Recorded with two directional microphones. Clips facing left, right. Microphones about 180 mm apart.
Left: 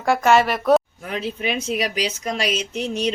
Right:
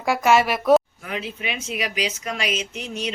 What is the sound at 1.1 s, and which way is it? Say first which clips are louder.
Speech: left 5 dB; 35° left (ahead or behind).